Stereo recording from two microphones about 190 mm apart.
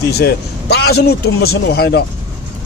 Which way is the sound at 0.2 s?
60° left (ahead or behind).